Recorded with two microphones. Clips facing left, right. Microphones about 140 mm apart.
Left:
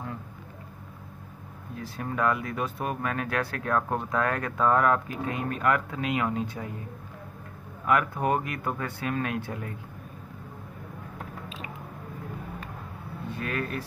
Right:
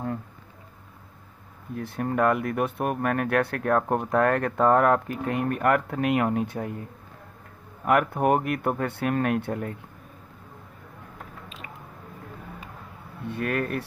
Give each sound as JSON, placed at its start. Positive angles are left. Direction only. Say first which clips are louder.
{"t": 1.8, "sound": "speech", "louder": "right 5 dB", "side_deg": -55}
{"t": 7.8, "sound": "speech", "louder": "right 3 dB", "side_deg": -60}
{"t": 13.3, "sound": "speech", "louder": "right 5 dB", "side_deg": -60}